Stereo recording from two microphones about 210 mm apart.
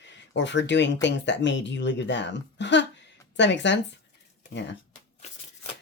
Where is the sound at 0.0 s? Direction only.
55° left (ahead or behind).